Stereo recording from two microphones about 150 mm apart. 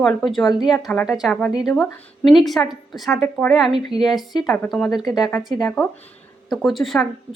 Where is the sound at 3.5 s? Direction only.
5° right (ahead or behind).